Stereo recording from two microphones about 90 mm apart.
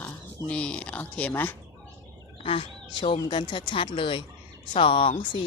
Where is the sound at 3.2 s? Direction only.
65° left (ahead or behind).